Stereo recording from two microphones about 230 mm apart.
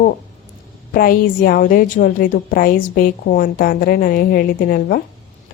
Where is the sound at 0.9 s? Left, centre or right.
Left.